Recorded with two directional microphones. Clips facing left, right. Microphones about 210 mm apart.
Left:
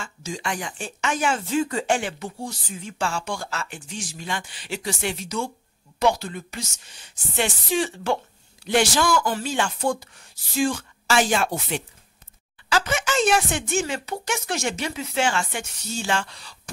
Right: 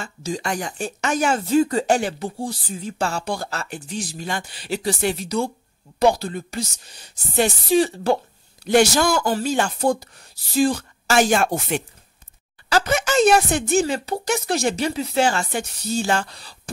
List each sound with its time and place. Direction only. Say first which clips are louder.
0.0 s speech: right 4 dB; 35° right (ahead or behind)